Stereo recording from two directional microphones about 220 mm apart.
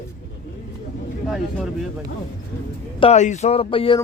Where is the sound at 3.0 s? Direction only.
30° left (ahead or behind).